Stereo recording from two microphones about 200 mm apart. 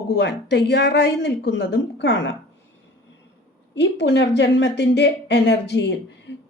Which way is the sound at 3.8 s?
60° left (ahead or behind).